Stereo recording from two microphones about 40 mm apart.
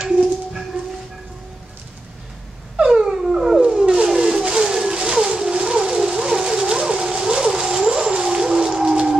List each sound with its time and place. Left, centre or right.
0.2 s dog: centre
2.8 s dog: centre
3.9 s a sound: centre
8.1 s whale vocalization: centre